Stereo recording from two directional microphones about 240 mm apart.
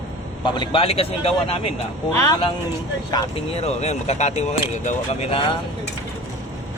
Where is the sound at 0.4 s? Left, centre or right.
Centre.